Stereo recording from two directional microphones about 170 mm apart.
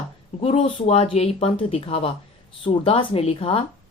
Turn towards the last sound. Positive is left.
turn(degrees=35)  # may be behind; listen again after turning